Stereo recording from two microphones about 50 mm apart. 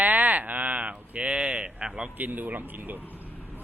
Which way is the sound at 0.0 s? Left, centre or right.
Right.